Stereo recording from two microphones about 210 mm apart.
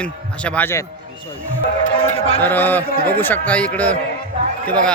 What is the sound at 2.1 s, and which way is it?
Music, 30° left (ahead or behind).